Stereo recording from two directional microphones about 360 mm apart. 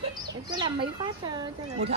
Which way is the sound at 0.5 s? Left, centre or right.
Centre.